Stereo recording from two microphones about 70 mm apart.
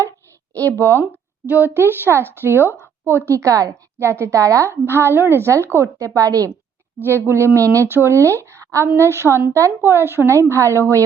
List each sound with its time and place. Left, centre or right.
0.5 s a woman's voice: left
0.8 s a woman's voice: right
1.0 s a woman's voice: right
3.9 s a woman's voice: right
4.7 s a woman's voice: right
6.1 s a woman's voice: right
7.0 s a woman's voice: right